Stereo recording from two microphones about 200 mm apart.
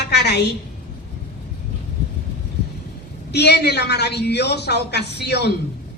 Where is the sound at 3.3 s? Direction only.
55° left (ahead or behind).